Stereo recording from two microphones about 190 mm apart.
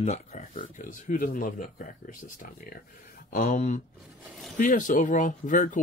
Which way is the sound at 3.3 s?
45° left (ahead or behind).